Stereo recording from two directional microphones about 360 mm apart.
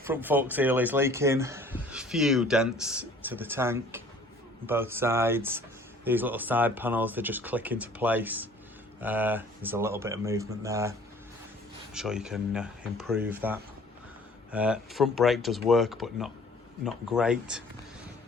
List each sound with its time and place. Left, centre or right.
0.0 s speech: centre
11.9 s speech: centre